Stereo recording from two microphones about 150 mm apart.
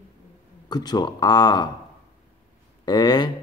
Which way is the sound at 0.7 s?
25° left (ahead or behind).